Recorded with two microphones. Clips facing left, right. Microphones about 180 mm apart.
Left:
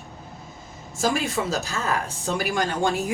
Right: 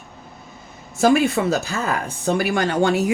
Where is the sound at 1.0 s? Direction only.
60° right (ahead or behind).